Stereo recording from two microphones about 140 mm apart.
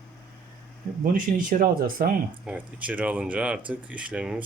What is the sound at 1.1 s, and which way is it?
Speech, 75° right (ahead or behind).